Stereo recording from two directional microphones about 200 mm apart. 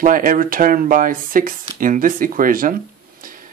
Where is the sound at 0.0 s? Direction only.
45° right (ahead or behind).